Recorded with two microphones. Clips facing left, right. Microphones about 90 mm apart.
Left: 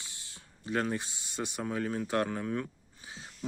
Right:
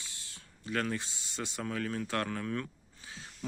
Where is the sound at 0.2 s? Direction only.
20° left (ahead or behind).